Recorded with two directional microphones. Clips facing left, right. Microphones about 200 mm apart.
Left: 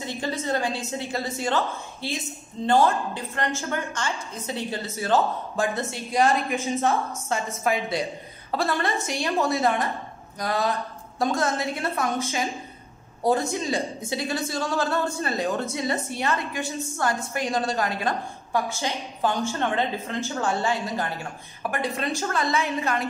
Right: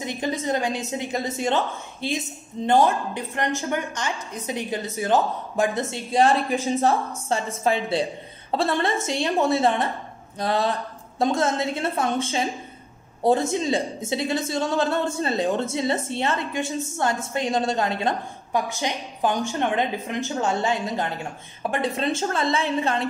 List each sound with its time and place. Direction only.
0.0 s a woman's voice: 15° right (ahead or behind)
13.5 s a woman's voice: 25° right (ahead or behind)